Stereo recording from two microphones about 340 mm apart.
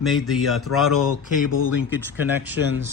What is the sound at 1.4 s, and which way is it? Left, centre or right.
Speech, left.